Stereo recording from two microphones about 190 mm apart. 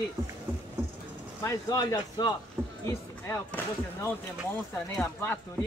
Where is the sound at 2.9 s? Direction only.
15° left (ahead or behind).